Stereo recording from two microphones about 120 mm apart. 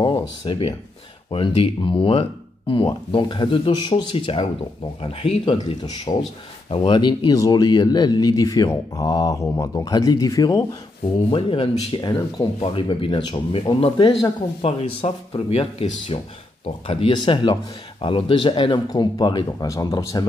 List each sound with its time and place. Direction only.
0.0 s speech: 45° left (ahead or behind)
11.2 s speech: 45° left (ahead or behind)
12.0 s speech: 35° left (ahead or behind)
12.5 s speech: 50° left (ahead or behind)
17.1 s speech: 40° left (ahead or behind)